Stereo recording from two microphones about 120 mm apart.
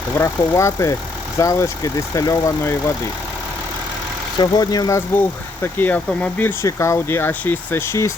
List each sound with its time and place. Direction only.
0.2 s speech: 25° left (ahead or behind)
4.4 s speech: 35° left (ahead or behind)
5.6 s speech: 15° left (ahead or behind)